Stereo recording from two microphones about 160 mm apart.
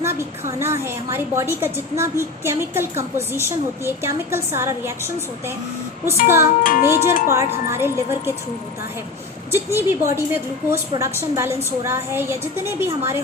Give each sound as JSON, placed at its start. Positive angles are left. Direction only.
{"t": 0.6, "sound": "a woman's voice", "side_deg": -15}
{"t": 6.2, "sound": "a woman's voice", "side_deg": -15}
{"t": 6.6, "sound": "wind chime", "side_deg": 60}
{"t": 7.3, "sound": "a woman's voice", "side_deg": -15}
{"t": 9.5, "sound": "a woman's voice", "side_deg": -15}